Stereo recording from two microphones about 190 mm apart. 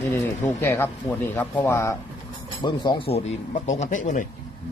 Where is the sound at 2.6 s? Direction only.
25° left (ahead or behind); by 4.2 s 40° left (ahead or behind).